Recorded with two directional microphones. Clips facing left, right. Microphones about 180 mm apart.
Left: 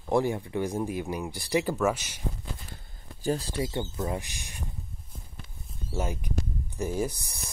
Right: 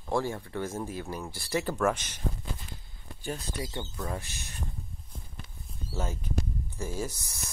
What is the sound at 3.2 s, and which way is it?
Speech, 35° left (ahead or behind).